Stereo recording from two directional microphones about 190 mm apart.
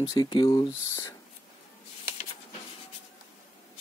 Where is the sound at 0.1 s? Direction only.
25° left (ahead or behind).